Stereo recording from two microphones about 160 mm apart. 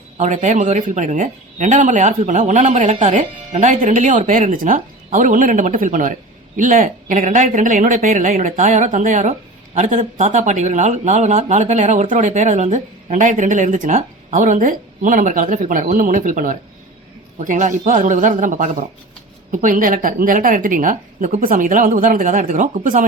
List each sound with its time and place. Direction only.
0.2 s a woman's voice: 50° right (ahead or behind)